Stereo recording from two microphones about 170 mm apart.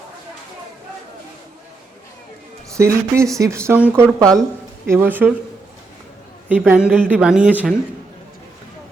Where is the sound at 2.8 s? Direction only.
15° right (ahead or behind).